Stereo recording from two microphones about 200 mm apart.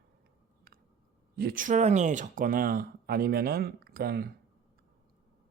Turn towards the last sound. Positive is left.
turn(degrees=-50)  # may be behind; listen again after turning